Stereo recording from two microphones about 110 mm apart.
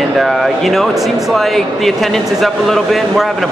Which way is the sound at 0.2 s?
Centre (ahead or behind).